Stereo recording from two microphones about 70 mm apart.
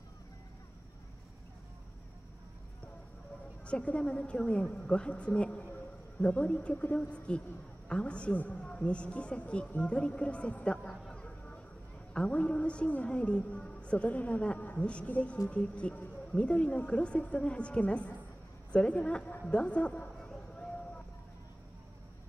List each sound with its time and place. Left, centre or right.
3.6 s a woman's voice: centre
11.1 s vehicle: centre
12.1 s a woman's voice: centre
18.7 s a sound: centre